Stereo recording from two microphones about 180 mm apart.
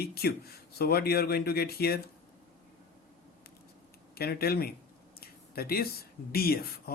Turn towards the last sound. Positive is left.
turn(degrees=55)  # may be behind; listen again after turning